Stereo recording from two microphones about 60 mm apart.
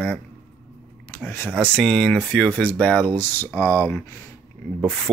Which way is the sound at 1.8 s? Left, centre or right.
Centre.